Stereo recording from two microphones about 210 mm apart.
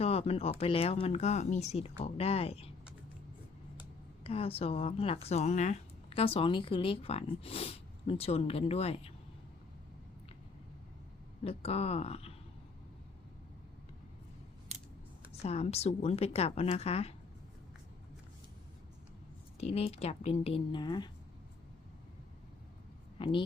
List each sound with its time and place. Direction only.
0.0 s speech: 30° left (ahead or behind)
4.2 s speech: 25° left (ahead or behind)
11.4 s speech: 30° left (ahead or behind)
15.3 s speech: 30° left (ahead or behind)
19.5 s speech: 30° left (ahead or behind)
23.1 s speech: 25° left (ahead or behind)